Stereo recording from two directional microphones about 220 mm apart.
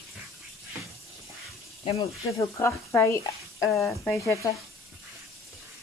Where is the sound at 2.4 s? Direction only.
10° left (ahead or behind).